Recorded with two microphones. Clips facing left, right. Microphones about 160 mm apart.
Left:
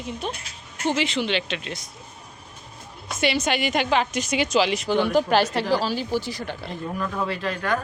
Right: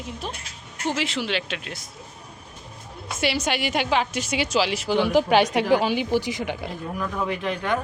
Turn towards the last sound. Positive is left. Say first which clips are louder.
# even
turn(degrees=-20)  # may be behind; listen again after turning